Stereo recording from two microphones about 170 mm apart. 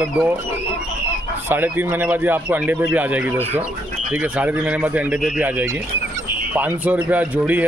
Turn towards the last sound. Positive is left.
turn(degrees=-10)  # may be behind; listen again after turning